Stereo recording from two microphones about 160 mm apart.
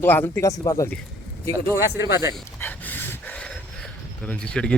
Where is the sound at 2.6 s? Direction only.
10° left (ahead or behind).